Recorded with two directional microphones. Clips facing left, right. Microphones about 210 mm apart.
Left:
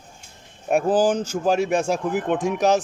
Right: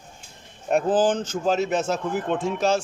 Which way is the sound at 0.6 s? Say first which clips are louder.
Left 1 dB; 10° left (ahead or behind).